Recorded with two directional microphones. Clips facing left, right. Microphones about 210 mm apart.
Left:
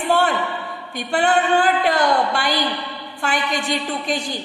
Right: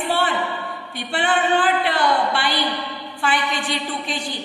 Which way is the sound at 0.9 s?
45° left (ahead or behind).